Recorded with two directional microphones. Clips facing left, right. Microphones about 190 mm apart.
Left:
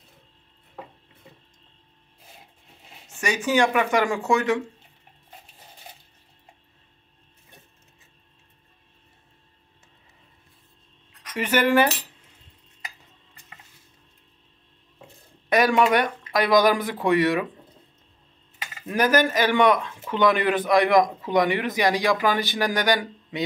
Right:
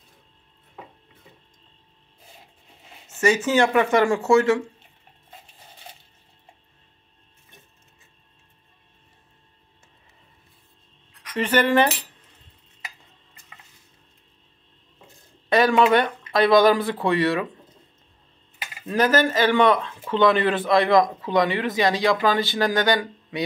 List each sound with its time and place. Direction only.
3.1 s a man's voice: 15° left (ahead or behind)
11.3 s a man's voice: 10° left (ahead or behind)
15.5 s a man's voice: 15° left (ahead or behind)
18.9 s a man's voice: 15° left (ahead or behind)